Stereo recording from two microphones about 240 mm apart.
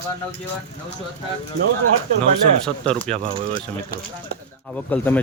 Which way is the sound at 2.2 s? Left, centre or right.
Centre.